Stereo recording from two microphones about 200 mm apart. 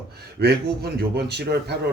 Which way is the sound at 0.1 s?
55° right (ahead or behind).